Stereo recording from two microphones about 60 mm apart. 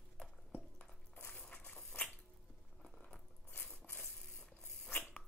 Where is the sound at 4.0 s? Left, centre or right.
Centre.